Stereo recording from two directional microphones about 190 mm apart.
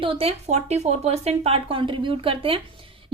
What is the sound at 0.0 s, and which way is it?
A woman's voice, 30° right (ahead or behind).